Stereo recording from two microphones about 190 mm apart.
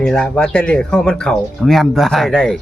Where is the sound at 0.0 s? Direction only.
5° left (ahead or behind).